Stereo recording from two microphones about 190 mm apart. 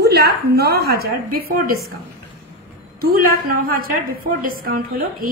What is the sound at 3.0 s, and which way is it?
A woman's voice, 50° right (ahead or behind).